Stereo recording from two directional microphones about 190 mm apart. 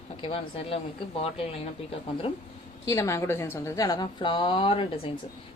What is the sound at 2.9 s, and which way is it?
A woman's voice, 15° left (ahead or behind).